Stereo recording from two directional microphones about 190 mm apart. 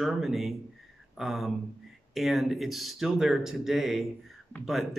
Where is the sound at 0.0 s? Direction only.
Centre (ahead or behind).